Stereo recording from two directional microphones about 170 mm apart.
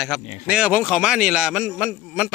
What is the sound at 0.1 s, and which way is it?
A man's voice, 5° right (ahead or behind).